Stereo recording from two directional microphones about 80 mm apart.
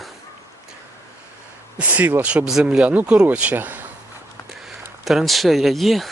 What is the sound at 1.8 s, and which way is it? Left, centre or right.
Speech, centre.